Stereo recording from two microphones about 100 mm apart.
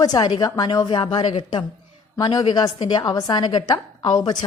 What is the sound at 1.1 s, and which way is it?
A woman's voice, 60° left (ahead or behind).